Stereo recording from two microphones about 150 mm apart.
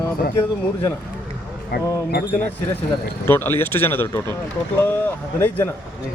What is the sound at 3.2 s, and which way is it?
Speech, 15° left (ahead or behind).